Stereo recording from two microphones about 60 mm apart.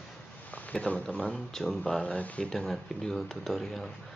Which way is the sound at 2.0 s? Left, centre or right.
Left.